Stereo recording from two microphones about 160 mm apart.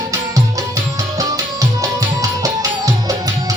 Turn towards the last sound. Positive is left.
turn(degrees=-20)  # may be behind; listen again after turning